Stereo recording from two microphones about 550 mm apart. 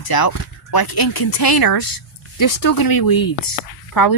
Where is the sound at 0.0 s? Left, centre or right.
Left.